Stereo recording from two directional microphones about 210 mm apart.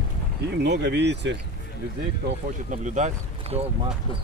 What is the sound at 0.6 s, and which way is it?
Speech, 55° right (ahead or behind).